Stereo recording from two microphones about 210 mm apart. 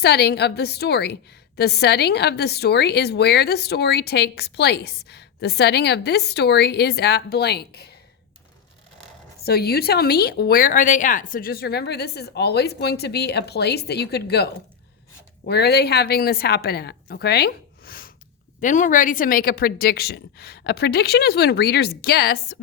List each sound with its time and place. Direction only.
0.0 s a woman's voice: 50° left (ahead or behind)
9.4 s a woman's voice: 50° left (ahead or behind)